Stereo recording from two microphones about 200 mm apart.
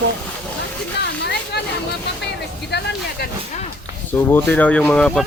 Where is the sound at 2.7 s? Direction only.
55° left (ahead or behind).